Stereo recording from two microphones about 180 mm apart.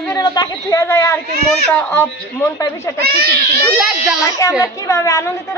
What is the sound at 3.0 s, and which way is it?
Speech, 60° right (ahead or behind).